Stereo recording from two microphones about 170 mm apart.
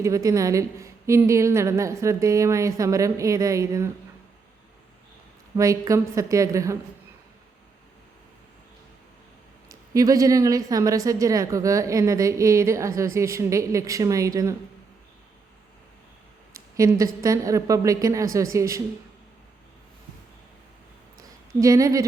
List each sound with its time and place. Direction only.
0.0 s a woman's voice: 20° right (ahead or behind)
5.5 s a woman's voice: 20° right (ahead or behind)
9.6 s a woman's voice: 20° right (ahead or behind)
16.6 s a woman's voice: 20° right (ahead or behind)
21.2 s a sound: 20° right (ahead or behind)